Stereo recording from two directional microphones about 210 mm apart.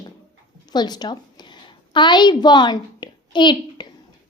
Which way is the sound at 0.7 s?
20° left (ahead or behind).